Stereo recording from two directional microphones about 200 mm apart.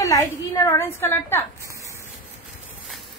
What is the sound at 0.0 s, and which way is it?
A woman's voice, 15° left (ahead or behind).